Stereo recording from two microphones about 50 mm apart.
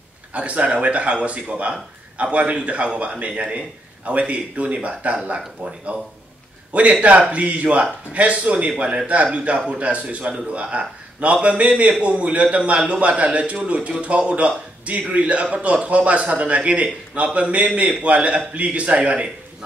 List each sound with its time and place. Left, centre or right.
0.3 s a man's voice: right